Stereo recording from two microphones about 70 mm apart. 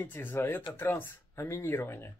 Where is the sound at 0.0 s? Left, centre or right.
Left.